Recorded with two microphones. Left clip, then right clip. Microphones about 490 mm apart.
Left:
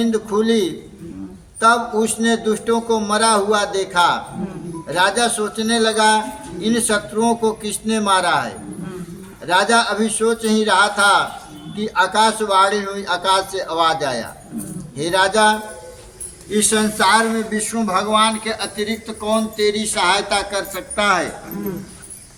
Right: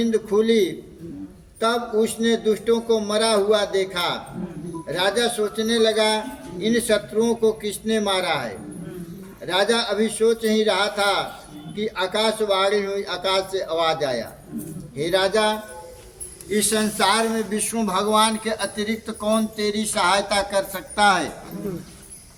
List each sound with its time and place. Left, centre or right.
0.0 s a man's voice: right
9.5 s a man's voice: right
16.5 s a man's voice: right